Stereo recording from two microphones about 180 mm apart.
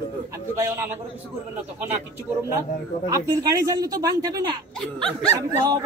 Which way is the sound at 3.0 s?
20° right (ahead or behind).